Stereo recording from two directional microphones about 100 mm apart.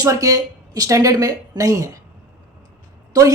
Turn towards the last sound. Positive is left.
turn(degrees=-35)  # may be behind; listen again after turning